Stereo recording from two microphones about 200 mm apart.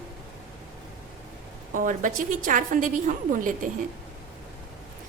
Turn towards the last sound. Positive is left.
turn(degrees=-40)  # may be behind; listen again after turning